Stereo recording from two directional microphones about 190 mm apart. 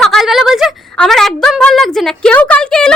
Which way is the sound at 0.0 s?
Centre (ahead or behind).